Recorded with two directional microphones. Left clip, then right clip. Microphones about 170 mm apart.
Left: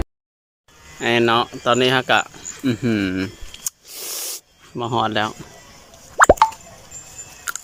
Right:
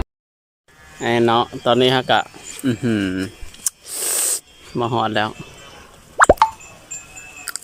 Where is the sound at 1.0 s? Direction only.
Centre (ahead or behind).